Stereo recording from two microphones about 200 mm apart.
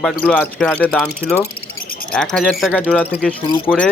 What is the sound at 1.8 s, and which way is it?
Bird, 45° left (ahead or behind).